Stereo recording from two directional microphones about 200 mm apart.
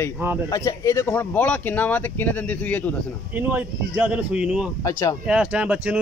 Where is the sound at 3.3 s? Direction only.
10° right (ahead or behind).